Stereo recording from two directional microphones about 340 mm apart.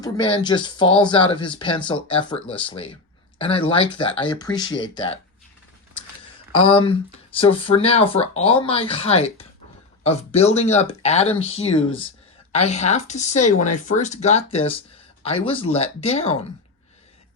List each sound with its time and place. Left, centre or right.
0.0 s speech: centre
6.6 s speech: centre